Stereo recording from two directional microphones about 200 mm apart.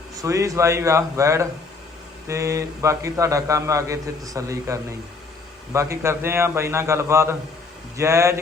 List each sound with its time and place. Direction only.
0.2 s a man's voice: 15° right (ahead or behind)